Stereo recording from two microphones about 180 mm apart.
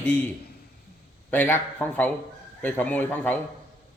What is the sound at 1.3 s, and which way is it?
A man's voice, 10° left (ahead or behind).